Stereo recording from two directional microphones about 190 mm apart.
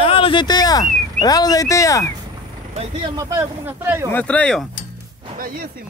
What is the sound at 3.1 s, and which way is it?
Speech, 10° right (ahead or behind).